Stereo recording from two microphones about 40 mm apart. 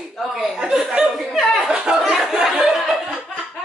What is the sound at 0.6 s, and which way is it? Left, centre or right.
Chuckle, centre.